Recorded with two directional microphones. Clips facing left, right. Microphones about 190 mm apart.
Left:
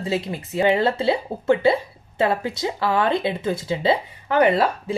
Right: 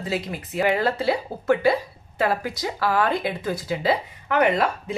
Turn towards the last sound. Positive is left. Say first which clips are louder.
# left 3 dB
turn(degrees=30)  # may be behind; listen again after turning